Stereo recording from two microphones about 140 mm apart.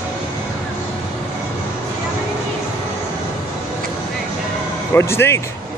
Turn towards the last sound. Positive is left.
turn(degrees=20)  # may be behind; listen again after turning